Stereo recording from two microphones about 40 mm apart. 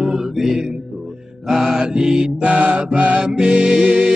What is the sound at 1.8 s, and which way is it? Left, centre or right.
Music, right.